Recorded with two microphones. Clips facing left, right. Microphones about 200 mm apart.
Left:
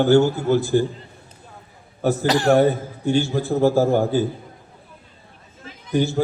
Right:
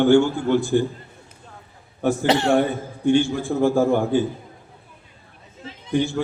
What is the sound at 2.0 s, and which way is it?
A man's voice, 40° left (ahead or behind).